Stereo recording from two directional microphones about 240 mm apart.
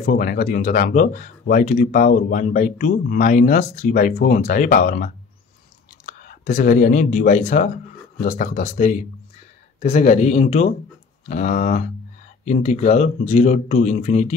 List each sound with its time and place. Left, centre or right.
0.0 s speech: left